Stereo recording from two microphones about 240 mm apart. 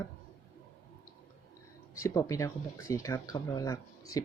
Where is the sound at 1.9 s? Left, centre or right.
Centre.